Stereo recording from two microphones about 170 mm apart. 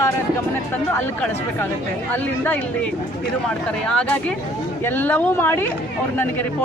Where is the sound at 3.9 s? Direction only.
5° left (ahead or behind).